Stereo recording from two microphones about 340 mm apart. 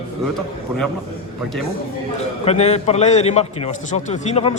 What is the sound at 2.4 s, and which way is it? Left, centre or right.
A man's voice, centre.